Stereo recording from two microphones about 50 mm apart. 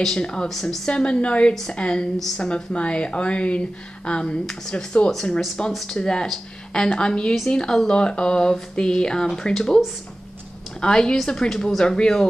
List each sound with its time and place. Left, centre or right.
0.0 s speech: centre
0.8 s speech: centre
1.5 s speech: centre
1.8 s speech: centre
2.1 s speech: centre
2.4 s speech: left
10.8 s speech: centre